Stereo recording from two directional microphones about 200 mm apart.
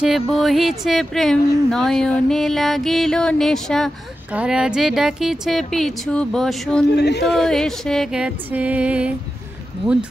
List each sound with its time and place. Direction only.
0.0 s speech: centre (ahead or behind)
7.0 s speech: 55° left (ahead or behind)
7.2 s speech: centre (ahead or behind)